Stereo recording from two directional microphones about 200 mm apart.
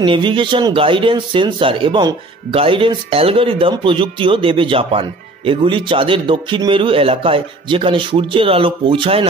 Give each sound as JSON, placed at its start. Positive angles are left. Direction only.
{"t": 0.0, "sound": "a man's voice", "side_deg": -25}